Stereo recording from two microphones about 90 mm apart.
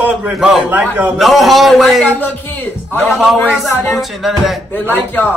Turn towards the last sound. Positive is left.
turn(degrees=20)  # may be behind; listen again after turning